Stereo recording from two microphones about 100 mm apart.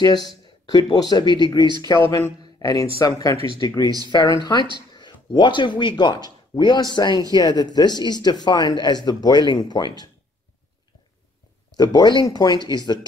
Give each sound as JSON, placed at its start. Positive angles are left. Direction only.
{"t": 0.0, "sound": "speech", "side_deg": 40}
{"t": 2.0, "sound": "speech", "side_deg": 25}
{"t": 2.6, "sound": "speech", "side_deg": 35}
{"t": 11.7, "sound": "speech", "side_deg": 40}